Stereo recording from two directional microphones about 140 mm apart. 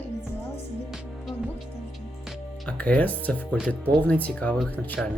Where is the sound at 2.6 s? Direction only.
10° left (ahead or behind).